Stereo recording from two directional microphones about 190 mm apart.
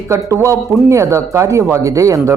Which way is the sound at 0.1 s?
15° right (ahead or behind).